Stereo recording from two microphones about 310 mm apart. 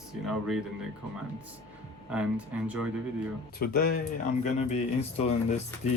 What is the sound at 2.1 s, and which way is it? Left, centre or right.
Speech, centre.